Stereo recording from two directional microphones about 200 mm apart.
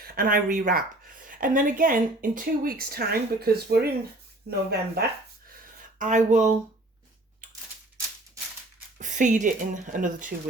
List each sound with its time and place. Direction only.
0.0 s speech: 45° right (ahead or behind)
6.0 s speech: 40° right (ahead or behind)
9.0 s speech: 40° right (ahead or behind)